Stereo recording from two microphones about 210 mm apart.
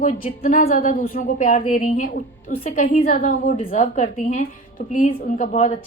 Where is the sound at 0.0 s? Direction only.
40° left (ahead or behind).